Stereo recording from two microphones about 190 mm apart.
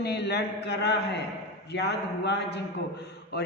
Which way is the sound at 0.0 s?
60° left (ahead or behind).